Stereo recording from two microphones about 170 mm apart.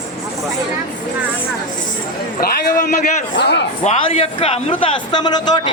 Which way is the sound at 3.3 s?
90° left.